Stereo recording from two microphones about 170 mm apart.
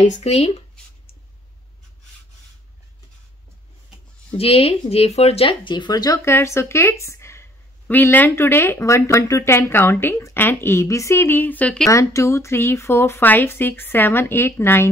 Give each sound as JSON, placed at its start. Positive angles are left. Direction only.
{"t": 0.0, "sound": "speech", "side_deg": 40}
{"t": 4.4, "sound": "speech", "side_deg": 35}
{"t": 11.9, "sound": "speech", "side_deg": 20}